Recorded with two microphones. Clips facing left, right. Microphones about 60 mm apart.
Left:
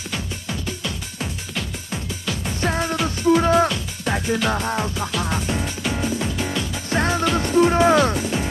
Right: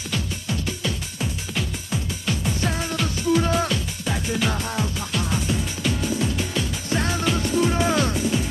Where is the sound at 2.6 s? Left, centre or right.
Left.